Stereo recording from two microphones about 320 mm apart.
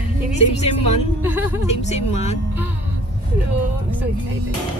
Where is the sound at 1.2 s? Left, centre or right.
Centre.